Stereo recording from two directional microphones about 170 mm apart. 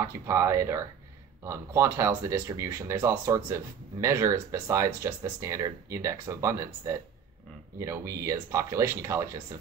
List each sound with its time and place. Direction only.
0.0 s speech: 15° right (ahead or behind)